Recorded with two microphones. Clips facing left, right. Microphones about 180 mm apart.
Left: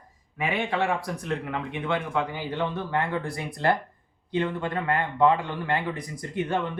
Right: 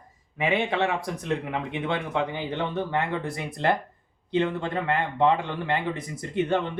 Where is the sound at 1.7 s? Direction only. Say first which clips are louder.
Even; 25° right (ahead or behind).